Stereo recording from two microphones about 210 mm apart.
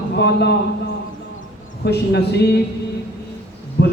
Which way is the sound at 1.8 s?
50° left (ahead or behind).